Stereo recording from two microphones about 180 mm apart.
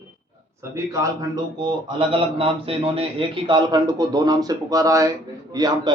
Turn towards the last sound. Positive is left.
turn(degrees=-20)  # may be behind; listen again after turning